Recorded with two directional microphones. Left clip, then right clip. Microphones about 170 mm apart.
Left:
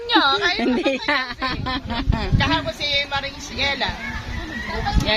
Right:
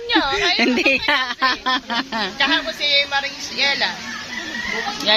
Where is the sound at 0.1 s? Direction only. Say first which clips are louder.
Even; 60° left (ahead or behind).